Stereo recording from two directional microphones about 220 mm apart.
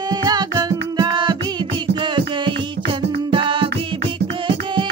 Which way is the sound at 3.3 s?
25° right (ahead or behind).